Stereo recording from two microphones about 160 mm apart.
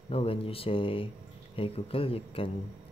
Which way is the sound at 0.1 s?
35° left (ahead or behind).